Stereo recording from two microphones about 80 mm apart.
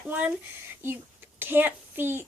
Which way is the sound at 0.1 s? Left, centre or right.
Right.